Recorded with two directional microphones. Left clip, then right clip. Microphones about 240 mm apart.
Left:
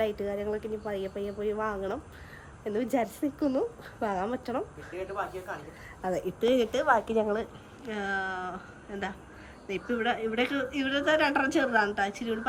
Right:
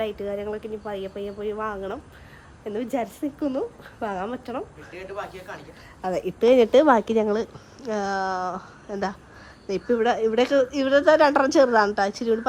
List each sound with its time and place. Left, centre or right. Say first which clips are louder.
0.0 s speech: right 2 dB; centre
6.0 s speech: right 5 dB; centre
6.2 s speech: right 10 dB; right
6.7 s a woman's voice: right 10 dB; right
7.0 s a woman's voice: right 5 dB; left
7.8 s a woman's voice: right 6 dB; centre
8.4 s a woman's voice: right 8 dB; left
9.6 s a woman's voice: right 8 dB; centre